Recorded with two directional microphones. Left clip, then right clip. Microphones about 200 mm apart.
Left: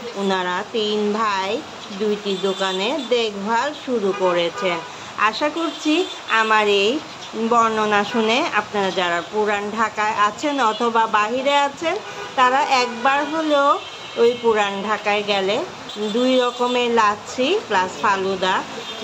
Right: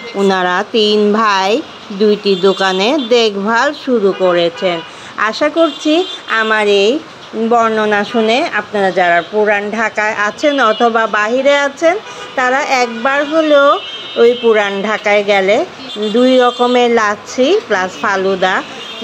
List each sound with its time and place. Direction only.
0.2 s speech: 45° right (ahead or behind)
4.2 s speech: 25° right (ahead or behind)